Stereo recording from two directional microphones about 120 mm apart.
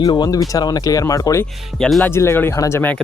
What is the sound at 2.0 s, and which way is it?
Speech, 20° left (ahead or behind).